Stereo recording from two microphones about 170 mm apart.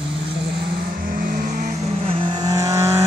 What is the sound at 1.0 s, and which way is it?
Vehicle, 55° right (ahead or behind).